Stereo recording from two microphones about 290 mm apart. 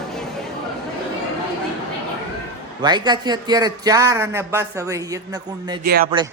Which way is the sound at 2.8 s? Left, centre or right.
Centre.